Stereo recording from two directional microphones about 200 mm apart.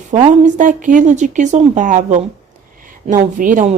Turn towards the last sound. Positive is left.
turn(degrees=-40)  # may be behind; listen again after turning